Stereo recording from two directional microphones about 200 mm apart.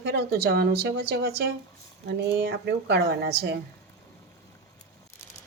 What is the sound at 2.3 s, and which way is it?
Speech, 55° right (ahead or behind).